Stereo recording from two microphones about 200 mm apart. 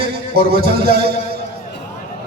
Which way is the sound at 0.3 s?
50° right (ahead or behind).